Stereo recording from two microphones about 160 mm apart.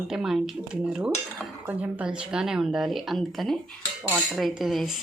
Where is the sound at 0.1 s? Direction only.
5° right (ahead or behind).